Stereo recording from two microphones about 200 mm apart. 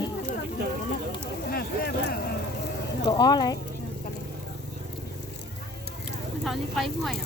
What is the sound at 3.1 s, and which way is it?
Speech, 20° left (ahead or behind).